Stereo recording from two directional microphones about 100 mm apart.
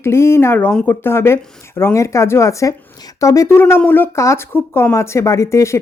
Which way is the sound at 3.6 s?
20° left (ahead or behind).